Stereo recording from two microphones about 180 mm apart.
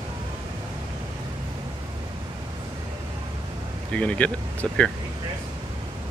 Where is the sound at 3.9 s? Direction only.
10° left (ahead or behind).